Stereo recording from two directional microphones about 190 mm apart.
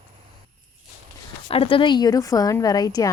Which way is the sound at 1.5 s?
30° left (ahead or behind).